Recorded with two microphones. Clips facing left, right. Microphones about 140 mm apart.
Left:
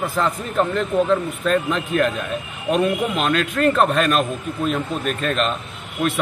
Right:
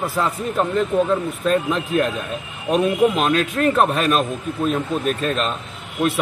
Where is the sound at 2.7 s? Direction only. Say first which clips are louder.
Right 3 dB; 5° right (ahead or behind).